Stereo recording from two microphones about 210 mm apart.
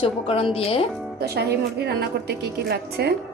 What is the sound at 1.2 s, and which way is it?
Speech, 50° right (ahead or behind).